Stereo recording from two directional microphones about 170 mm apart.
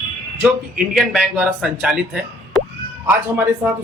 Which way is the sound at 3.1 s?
10° right (ahead or behind).